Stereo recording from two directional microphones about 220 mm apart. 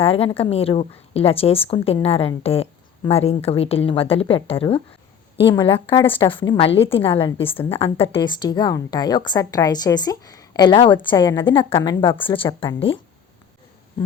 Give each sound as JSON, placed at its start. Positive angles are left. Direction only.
{"t": 0.0, "sound": "a woman's voice", "side_deg": 25}